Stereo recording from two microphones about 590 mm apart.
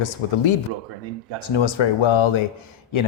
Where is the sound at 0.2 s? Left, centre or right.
Left.